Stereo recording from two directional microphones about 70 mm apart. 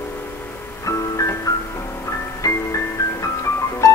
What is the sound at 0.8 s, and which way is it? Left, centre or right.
Music, left.